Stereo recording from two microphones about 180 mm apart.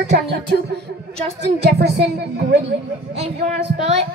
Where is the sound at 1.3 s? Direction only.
70° right (ahead or behind).